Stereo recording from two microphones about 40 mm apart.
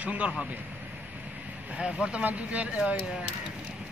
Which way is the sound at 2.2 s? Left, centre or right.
Right.